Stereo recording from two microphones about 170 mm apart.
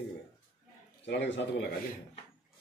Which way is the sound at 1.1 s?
90° left.